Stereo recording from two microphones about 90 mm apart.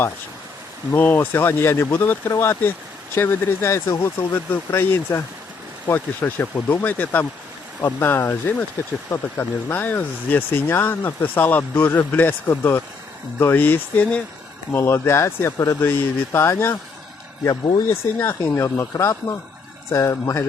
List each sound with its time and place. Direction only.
0.9 s speech: 20° left (ahead or behind)
17.8 s speech: 30° left (ahead or behind)